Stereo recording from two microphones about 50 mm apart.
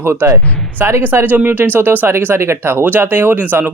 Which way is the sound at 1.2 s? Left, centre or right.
Right.